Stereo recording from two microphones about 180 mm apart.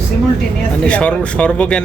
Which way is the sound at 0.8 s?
5° left (ahead or behind).